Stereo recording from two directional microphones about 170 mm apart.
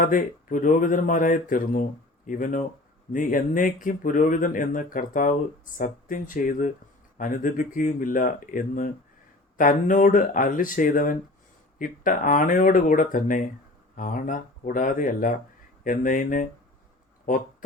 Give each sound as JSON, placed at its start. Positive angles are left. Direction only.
{"t": 0.0, "sound": "speech", "side_deg": 55}